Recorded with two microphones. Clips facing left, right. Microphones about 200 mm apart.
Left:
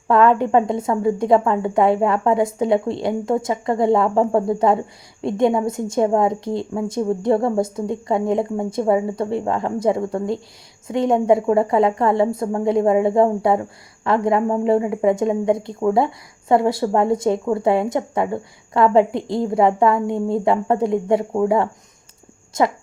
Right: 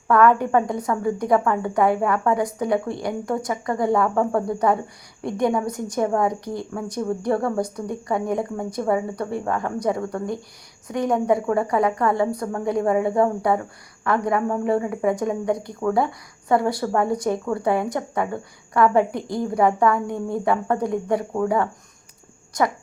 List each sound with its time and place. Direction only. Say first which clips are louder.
0.1 s a woman's voice: left 2 dB; 25° left (ahead or behind)